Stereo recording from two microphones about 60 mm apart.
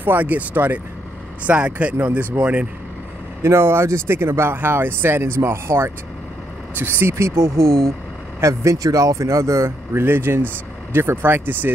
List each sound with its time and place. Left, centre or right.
0.0 s speech: right
3.4 s speech: right
10.0 s speech: right